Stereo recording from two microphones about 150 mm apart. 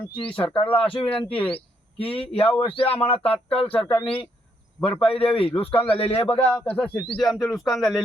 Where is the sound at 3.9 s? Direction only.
35° left (ahead or behind).